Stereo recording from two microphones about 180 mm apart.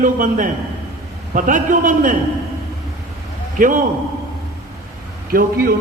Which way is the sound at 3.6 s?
50° right (ahead or behind).